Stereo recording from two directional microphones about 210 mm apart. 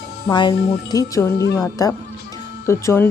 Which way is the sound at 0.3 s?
20° left (ahead or behind).